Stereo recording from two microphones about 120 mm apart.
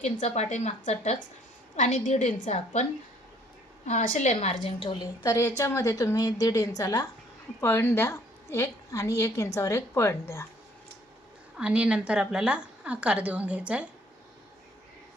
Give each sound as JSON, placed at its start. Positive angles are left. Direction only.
{"t": 0.0, "sound": "a woman's voice", "side_deg": 85}
{"t": 1.7, "sound": "a woman's voice", "side_deg": 85}
{"t": 3.8, "sound": "a woman's voice", "side_deg": 85}
{"t": 5.2, "sound": "a woman's voice", "side_deg": 25}
{"t": 11.5, "sound": "a woman's voice", "side_deg": -10}